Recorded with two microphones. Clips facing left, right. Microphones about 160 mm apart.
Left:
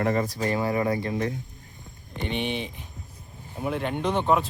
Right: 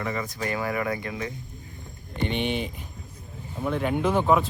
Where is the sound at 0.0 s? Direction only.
40° left (ahead or behind).